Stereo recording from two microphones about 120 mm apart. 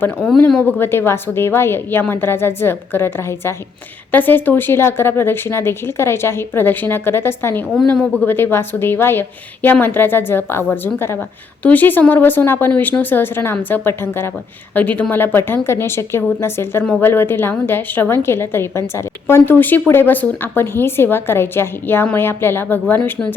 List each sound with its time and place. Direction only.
0.0 s a woman's voice: 10° left (ahead or behind)